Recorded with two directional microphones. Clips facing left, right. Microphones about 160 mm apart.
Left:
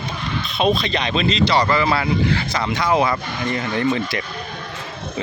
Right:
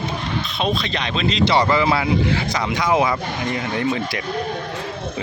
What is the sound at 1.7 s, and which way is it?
Speech, 20° right (ahead or behind).